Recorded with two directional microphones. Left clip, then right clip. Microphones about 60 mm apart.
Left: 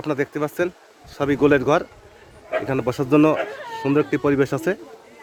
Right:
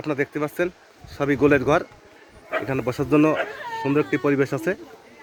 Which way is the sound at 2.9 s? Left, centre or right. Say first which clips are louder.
Left 2 dB; left.